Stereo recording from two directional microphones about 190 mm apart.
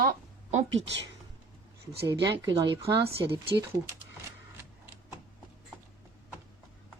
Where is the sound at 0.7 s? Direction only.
80° right.